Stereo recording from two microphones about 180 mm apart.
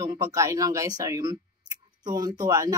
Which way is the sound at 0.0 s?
20° right (ahead or behind).